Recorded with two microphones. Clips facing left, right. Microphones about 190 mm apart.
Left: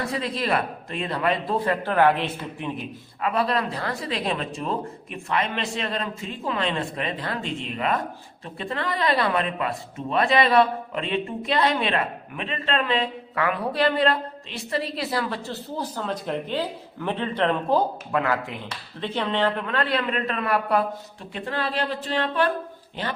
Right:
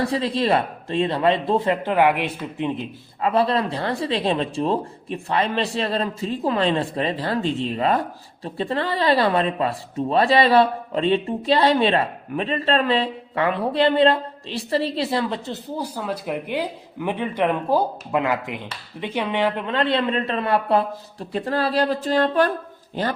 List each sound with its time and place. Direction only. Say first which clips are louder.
0.0 s speech: right 6 dB; 30° right (ahead or behind)